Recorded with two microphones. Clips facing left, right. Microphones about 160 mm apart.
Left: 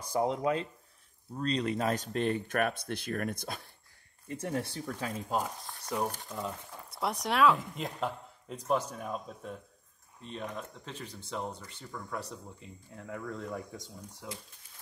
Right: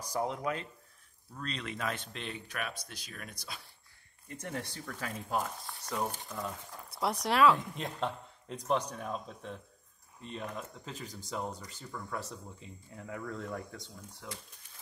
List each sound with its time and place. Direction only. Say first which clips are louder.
0.0 s speech: left 4 dB; 30° left (ahead or behind); by 3.6 s 50° left (ahead or behind)
4.5 s speech: left 5 dB; 20° left (ahead or behind)
6.7 s speech: right 3 dB; centre (ahead or behind)